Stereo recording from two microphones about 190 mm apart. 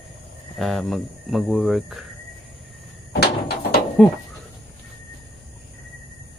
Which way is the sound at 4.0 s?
5° left (ahead or behind).